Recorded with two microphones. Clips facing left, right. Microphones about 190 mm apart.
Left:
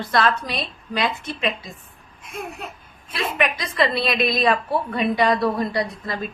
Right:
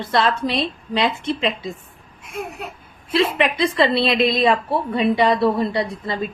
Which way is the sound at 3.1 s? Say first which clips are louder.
Right 6 dB; 30° right (ahead or behind).